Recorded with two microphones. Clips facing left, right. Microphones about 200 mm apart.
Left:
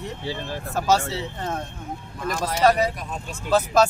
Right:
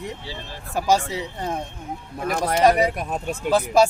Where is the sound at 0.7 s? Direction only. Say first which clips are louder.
Right 1 dB; 10° right (ahead or behind).